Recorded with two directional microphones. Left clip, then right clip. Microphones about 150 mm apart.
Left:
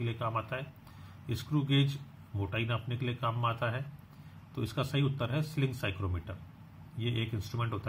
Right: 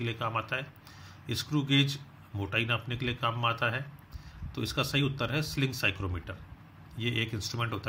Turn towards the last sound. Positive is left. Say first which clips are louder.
# right 4 dB
turn(degrees=-25)  # may be behind; listen again after turning